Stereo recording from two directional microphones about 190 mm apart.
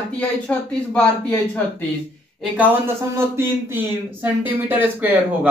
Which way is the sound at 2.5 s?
15° right (ahead or behind).